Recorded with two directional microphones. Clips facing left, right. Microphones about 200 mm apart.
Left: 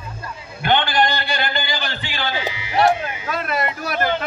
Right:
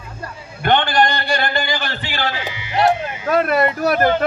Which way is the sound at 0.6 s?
45° right (ahead or behind).